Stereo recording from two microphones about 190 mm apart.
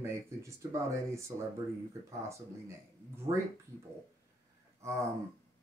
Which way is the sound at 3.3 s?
25° right (ahead or behind).